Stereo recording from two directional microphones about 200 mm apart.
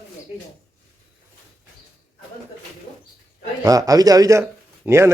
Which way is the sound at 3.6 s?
15° right (ahead or behind).